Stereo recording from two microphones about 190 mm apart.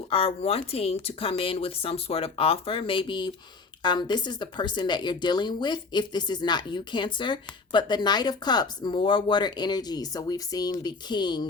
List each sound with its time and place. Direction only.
0.1 s speech: 30° left (ahead or behind)